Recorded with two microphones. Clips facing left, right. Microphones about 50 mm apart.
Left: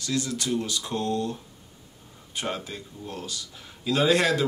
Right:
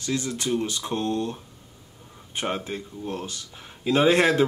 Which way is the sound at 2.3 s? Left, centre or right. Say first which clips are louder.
Right 3 dB; right.